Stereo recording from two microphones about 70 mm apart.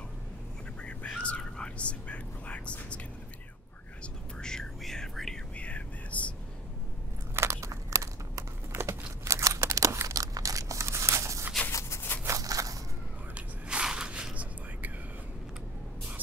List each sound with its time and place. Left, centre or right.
0.8 s whispering: centre
4.0 s whispering: centre
5.6 s whispering: centre
7.3 s crumpling: right
10.1 s tearing: right
11.7 s a sound: left
12.3 s crackle: right
13.3 s whispering: centre